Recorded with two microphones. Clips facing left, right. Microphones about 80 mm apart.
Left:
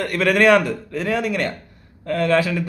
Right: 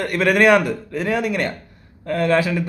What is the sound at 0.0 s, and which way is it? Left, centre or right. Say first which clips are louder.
A man's voice: right 1 dB; centre.